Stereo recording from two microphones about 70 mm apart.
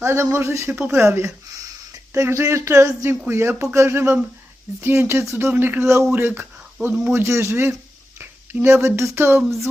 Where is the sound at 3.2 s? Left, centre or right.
Right.